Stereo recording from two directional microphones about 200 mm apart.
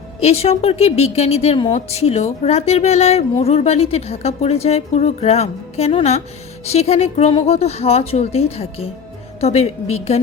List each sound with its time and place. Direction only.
0.2 s a woman's voice: 30° left (ahead or behind)